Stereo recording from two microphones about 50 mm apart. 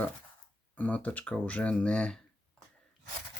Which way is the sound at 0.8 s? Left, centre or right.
Left.